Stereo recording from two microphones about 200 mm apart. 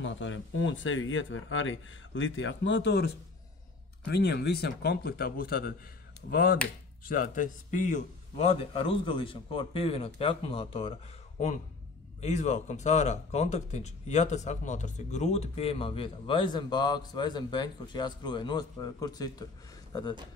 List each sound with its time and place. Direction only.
0.0 s speech: 70° left (ahead or behind)
4.1 s a man's voice: 55° left (ahead or behind); by 20.2 s 20° left (ahead or behind)